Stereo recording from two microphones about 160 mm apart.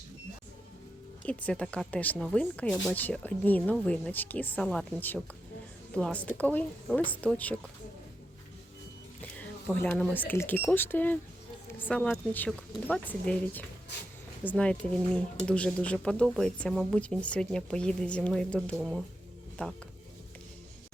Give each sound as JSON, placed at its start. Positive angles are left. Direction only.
{"t": 1.2, "sound": "speech", "side_deg": 10}
{"t": 9.2, "sound": "speech", "side_deg": 10}
{"t": 19.6, "sound": "speech", "side_deg": 10}